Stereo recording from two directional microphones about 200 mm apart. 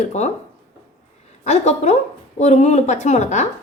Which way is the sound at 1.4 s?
35° left (ahead or behind).